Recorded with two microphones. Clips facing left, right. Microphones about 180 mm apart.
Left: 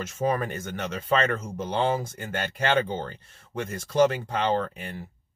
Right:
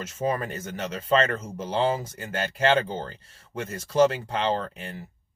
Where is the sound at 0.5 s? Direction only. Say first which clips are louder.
Even; 35° right (ahead or behind).